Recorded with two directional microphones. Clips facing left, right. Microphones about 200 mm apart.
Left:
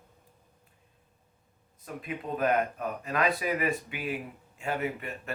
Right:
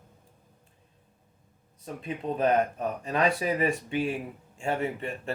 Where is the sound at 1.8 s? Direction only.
30° right (ahead or behind).